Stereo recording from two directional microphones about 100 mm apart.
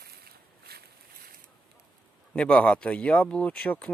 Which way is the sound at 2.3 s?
10° left (ahead or behind).